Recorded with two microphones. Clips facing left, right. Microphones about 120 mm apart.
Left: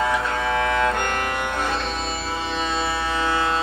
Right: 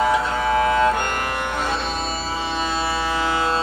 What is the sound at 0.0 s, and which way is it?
Music, 15° right (ahead or behind).